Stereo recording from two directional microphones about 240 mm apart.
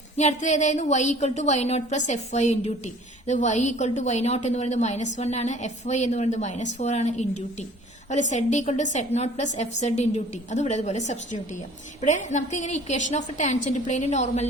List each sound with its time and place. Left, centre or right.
0.2 s a woman's voice: left